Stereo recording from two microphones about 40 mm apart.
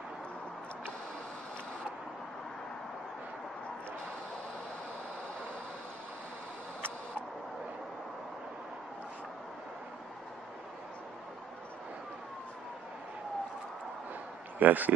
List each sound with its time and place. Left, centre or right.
14.6 s speech: right